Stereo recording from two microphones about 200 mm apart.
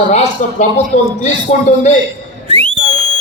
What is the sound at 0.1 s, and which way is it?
A man's voice, 35° left (ahead or behind).